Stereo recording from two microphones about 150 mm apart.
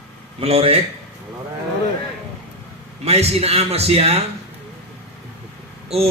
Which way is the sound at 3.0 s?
45° right (ahead or behind).